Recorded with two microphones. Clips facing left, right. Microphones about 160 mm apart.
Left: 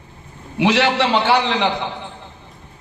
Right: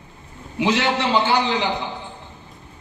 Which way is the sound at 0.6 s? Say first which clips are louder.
Left 4 dB; 70° left (ahead or behind).